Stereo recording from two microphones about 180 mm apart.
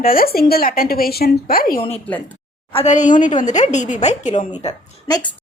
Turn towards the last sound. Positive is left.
turn(degrees=25)  # may be behind; listen again after turning